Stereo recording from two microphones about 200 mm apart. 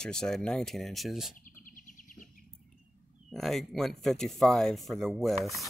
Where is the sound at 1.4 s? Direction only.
45° left (ahead or behind).